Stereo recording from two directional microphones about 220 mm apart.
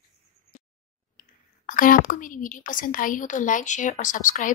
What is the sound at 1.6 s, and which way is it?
Speech, 40° left (ahead or behind).